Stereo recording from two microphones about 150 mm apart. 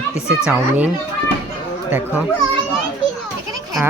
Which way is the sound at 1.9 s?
10° right (ahead or behind).